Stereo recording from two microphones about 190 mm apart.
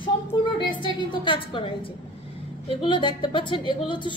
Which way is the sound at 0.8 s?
25° left (ahead or behind).